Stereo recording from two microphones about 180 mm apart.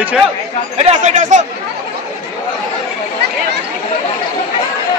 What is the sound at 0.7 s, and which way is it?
Speech, 40° right (ahead or behind).